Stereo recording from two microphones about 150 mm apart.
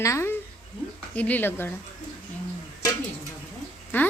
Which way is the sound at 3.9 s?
15° left (ahead or behind).